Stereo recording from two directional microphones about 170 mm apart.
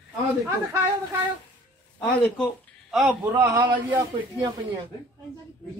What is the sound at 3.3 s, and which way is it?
Speech, 20° right (ahead or behind).